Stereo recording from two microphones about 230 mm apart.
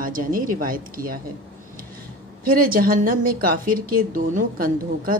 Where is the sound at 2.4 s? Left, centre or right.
Right.